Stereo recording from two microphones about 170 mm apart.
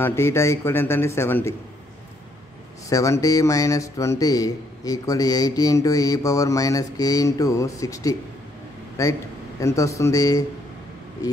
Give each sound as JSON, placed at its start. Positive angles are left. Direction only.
{"t": 0.0, "sound": "a man's voice", "side_deg": 15}
{"t": 2.9, "sound": "a man's voice", "side_deg": 20}